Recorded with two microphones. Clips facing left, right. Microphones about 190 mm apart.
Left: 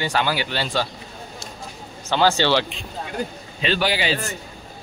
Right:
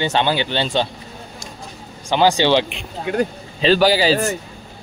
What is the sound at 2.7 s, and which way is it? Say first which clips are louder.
Speech: right 7 dB; 70° right (ahead or behind).